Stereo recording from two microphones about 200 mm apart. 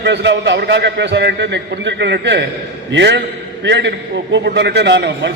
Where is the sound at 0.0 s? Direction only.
60° right (ahead or behind).